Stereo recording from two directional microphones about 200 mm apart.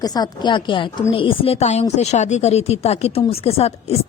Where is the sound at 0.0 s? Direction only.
20° left (ahead or behind).